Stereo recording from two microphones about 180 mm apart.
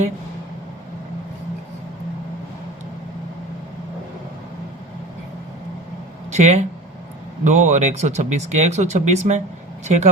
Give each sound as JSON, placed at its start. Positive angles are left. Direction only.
{"t": 6.3, "sound": "speech", "side_deg": -40}